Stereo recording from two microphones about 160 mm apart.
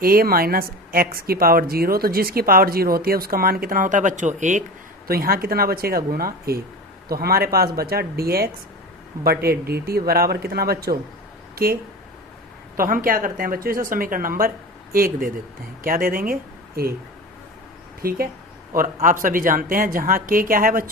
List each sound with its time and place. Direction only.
0.0 s a woman's voice: 65° right (ahead or behind); by 4.6 s 50° right (ahead or behind)
5.0 s a woman's voice: 70° right (ahead or behind)
18.0 s a woman's voice: 65° right (ahead or behind)